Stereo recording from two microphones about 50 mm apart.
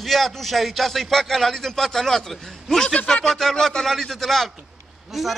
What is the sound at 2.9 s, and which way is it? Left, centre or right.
Speech, left.